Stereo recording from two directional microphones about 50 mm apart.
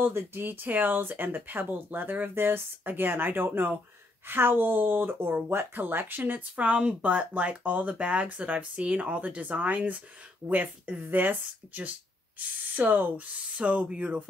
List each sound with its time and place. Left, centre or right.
0.1 s speech: right
6.5 s speech: right